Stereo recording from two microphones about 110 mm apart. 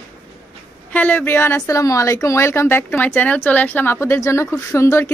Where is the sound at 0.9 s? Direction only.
15° left (ahead or behind).